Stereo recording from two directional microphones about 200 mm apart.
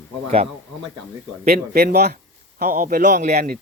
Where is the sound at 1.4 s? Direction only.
50° right (ahead or behind).